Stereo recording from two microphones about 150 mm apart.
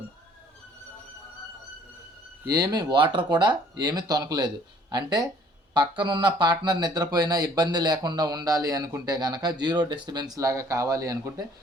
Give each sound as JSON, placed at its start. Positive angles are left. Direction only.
{"t": 2.5, "sound": "speech", "side_deg": -25}